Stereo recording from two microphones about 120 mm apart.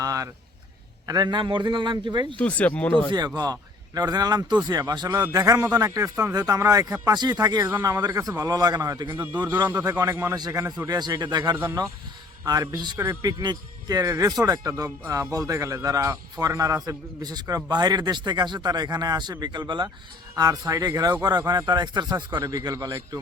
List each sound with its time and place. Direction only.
0.0 s a sound: 30° right (ahead or behind)
1.0 s speech: 35° right (ahead or behind)
2.4 s speech: 10° left (ahead or behind)
3.1 s speech: 35° right (ahead or behind)
10.0 s speech: 20° right (ahead or behind)
10.3 s speech: 35° right (ahead or behind)
11.5 s speech: 20° right (ahead or behind)
12.5 s speech: 35° right (ahead or behind)
13.0 s speech: 25° right (ahead or behind)